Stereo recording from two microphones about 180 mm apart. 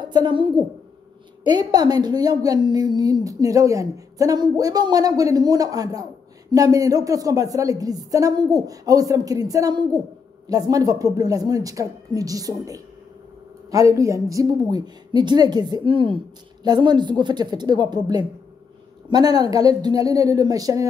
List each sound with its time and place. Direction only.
0.1 s a woman's voice: 25° right (ahead or behind)